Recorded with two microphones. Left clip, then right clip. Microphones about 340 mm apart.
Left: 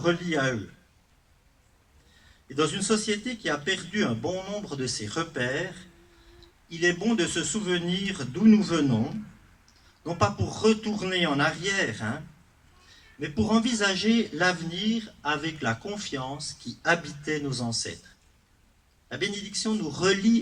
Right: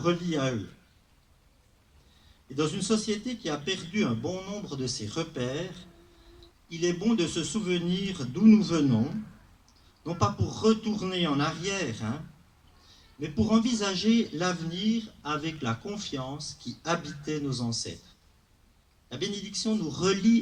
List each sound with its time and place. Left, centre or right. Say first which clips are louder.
0.0 s a man's voice: left 3 dB; left
2.6 s a man's voice: left 3 dB; left
6.7 s a man's voice: left 3 dB; left
10.2 s a man's voice: left 3 dB; left
13.1 s a man's voice: left 1 dB; left
19.0 s a man's voice: left 3 dB; left